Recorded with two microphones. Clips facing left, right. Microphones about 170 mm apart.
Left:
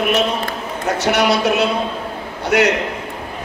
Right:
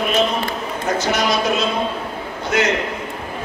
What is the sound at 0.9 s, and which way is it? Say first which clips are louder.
A man's voice: left 4 dB; 70° left (ahead or behind).